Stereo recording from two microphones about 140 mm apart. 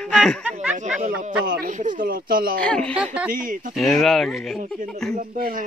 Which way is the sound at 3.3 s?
80° right.